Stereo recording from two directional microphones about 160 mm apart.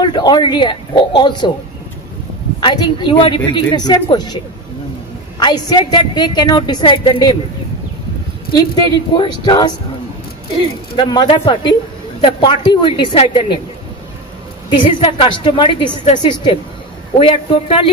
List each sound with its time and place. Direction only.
0.0 s a woman's voice: 25° left (ahead or behind)
2.6 s a woman's voice: 30° left (ahead or behind)
5.4 s a woman's voice: 25° left (ahead or behind)
8.5 s a woman's voice: 25° left (ahead or behind)
14.7 s a woman's voice: 30° left (ahead or behind)
17.3 s a woman's voice: 35° left (ahead or behind)